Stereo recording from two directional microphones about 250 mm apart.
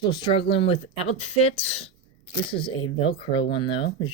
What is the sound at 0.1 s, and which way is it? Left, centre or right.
Speech, centre.